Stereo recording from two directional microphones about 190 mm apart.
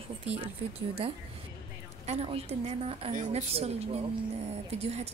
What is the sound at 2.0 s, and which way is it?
A woman's voice, 30° right (ahead or behind).